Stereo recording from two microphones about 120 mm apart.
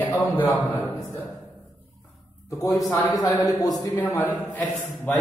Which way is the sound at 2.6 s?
30° left (ahead or behind).